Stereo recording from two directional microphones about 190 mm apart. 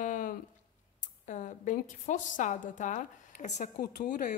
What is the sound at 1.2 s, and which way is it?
A woman's voice, 40° left (ahead or behind).